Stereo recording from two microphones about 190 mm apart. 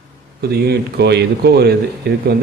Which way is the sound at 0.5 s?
60° right (ahead or behind).